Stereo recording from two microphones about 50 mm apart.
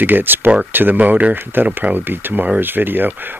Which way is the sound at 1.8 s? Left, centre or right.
Right.